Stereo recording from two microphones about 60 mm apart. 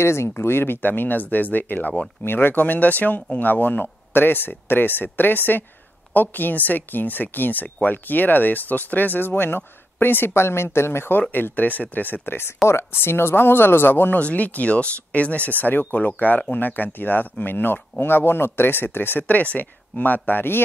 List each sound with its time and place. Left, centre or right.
0.0 s speech: left
14.2 s speech: left